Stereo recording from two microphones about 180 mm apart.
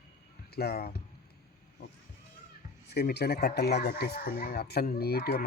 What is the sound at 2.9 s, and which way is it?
Speech, 65° left (ahead or behind).